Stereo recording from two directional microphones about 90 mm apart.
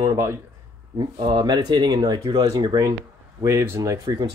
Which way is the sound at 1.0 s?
50° right (ahead or behind).